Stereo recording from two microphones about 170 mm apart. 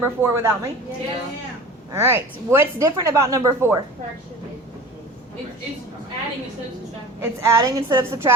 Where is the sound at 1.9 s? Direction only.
15° right (ahead or behind).